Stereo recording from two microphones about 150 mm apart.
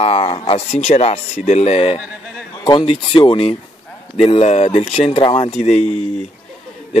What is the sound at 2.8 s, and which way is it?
A man's voice, 40° left (ahead or behind).